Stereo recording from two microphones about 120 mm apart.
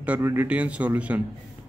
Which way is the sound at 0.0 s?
15° right (ahead or behind).